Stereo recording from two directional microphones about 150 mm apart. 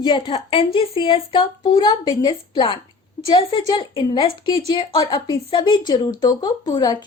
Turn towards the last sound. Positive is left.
turn(degrees=30)  # may be behind; listen again after turning